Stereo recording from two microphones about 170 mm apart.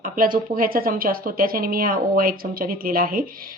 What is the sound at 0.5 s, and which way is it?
Speech, 55° right (ahead or behind).